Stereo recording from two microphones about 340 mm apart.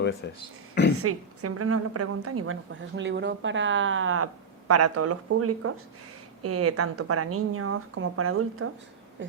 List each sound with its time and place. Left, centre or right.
0.9 s a woman's voice: right